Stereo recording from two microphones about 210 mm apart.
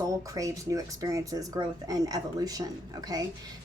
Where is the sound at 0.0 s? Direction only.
15° right (ahead or behind).